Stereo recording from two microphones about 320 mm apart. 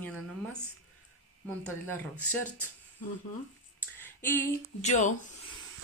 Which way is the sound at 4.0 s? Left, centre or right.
Centre.